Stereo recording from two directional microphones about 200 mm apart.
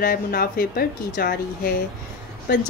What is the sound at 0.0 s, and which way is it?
Speech, 50° left (ahead or behind).